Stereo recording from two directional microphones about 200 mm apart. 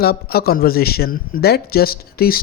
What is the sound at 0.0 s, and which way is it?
Speech, 50° left (ahead or behind).